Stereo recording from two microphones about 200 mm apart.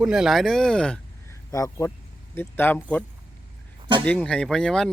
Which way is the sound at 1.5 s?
15° left (ahead or behind).